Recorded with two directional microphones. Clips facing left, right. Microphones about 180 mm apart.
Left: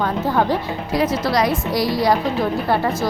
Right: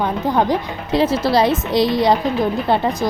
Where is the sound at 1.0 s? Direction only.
30° right (ahead or behind).